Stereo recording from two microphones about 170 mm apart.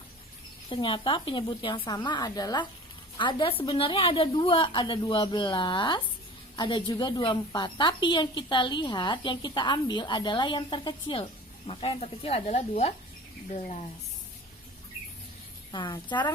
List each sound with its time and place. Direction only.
0.7 s a woman's voice: 30° left (ahead or behind)
15.7 s a woman's voice: 25° left (ahead or behind)